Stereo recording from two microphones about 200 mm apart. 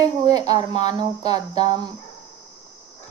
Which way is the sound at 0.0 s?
20° right (ahead or behind).